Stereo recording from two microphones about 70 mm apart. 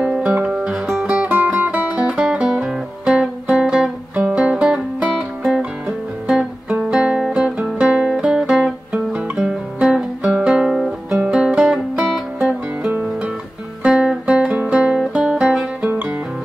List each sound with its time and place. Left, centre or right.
0.0 s music: centre
1.0 s music: centre
1.3 s music: right; by 9.2 s centre
9.4 s guitar: centre
11.3 s music: centre
13.8 s guitar: centre
15.0 s music: centre
15.9 s music: right